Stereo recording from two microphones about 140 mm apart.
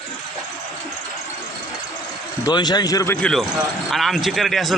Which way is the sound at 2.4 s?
30° left (ahead or behind).